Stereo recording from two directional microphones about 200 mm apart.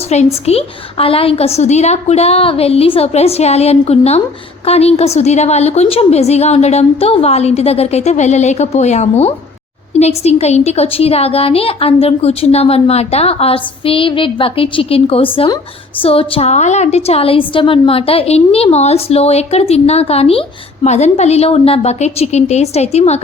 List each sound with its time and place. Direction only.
0.1 s a woman's voice: 35° left (ahead or behind)